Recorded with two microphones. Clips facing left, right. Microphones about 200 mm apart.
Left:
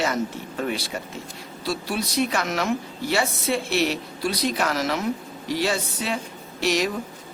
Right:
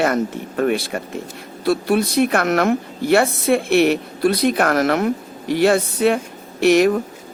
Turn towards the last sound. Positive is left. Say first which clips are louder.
# right 10 dB
turn(degrees=-55)  # may be behind; listen again after turning